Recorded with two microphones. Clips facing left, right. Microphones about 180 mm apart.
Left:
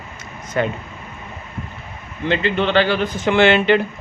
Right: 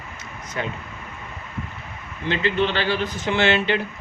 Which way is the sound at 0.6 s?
60° left (ahead or behind).